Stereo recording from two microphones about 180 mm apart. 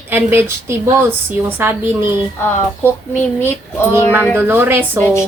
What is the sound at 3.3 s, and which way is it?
Speech, 15° left (ahead or behind).